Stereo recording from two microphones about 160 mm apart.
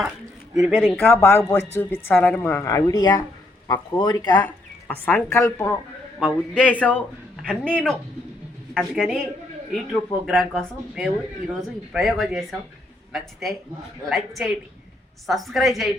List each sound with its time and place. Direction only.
0.5 s speech: centre (ahead or behind)
0.9 s a woman's voice: 15° left (ahead or behind)
4.4 s a woman's voice: 10° left (ahead or behind)